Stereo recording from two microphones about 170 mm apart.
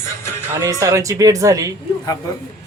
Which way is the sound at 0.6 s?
20° right (ahead or behind).